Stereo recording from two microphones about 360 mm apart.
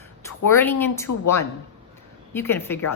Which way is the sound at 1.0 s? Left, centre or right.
Left.